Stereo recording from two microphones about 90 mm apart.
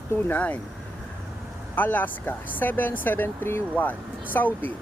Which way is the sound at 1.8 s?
20° left (ahead or behind).